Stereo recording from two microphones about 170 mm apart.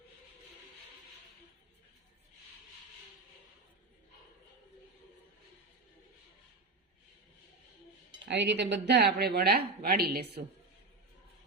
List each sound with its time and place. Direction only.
8.2 s speech: 90° right; by 10.4 s 65° right (ahead or behind)